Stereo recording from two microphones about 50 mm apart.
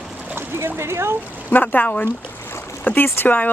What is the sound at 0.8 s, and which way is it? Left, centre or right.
Speech, right.